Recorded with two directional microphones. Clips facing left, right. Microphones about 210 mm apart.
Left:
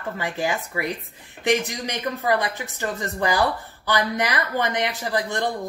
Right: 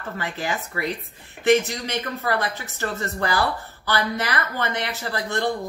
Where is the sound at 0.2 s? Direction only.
15° left (ahead or behind).